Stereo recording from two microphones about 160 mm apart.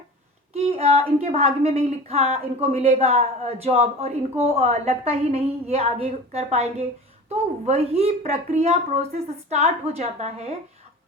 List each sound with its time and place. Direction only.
0.5 s speech: 40° right (ahead or behind)